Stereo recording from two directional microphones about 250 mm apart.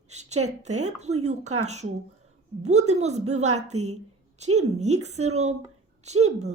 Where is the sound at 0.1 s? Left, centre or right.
Right.